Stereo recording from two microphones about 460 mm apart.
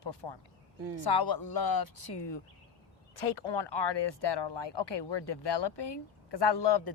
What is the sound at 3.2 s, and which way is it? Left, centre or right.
Speech, left.